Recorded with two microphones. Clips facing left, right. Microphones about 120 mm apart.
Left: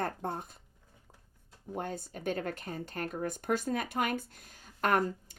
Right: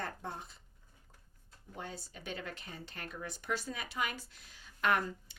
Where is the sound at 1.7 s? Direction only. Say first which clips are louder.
Left 8 dB; 50° left (ahead or behind).